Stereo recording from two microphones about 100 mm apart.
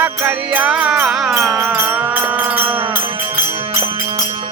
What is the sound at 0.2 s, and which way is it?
Music, 20° right (ahead or behind).